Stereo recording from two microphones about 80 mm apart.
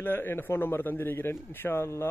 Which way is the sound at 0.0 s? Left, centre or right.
Left.